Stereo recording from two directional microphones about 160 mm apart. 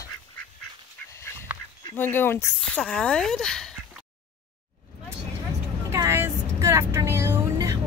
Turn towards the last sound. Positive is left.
turn(degrees=-20)  # may be behind; listen again after turning